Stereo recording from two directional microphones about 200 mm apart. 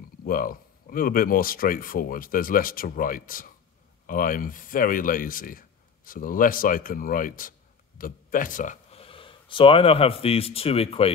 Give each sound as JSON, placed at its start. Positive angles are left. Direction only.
{"t": 0.2, "sound": "speech", "side_deg": 45}
{"t": 8.9, "sound": "speech", "side_deg": 25}